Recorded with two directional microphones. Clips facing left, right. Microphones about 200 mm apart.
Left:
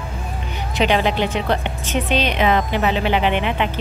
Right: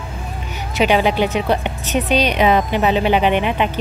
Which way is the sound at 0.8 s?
15° right (ahead or behind).